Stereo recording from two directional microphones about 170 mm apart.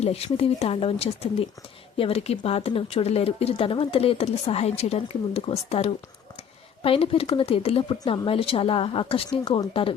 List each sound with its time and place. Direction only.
0.0 s speech: 35° left (ahead or behind)